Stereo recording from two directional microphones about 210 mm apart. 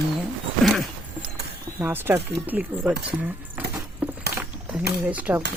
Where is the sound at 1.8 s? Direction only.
10° right (ahead or behind).